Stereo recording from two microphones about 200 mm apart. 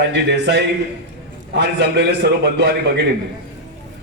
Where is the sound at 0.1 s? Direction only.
60° right (ahead or behind).